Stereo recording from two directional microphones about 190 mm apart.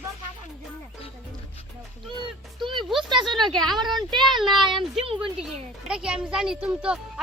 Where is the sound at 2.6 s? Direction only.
25° right (ahead or behind).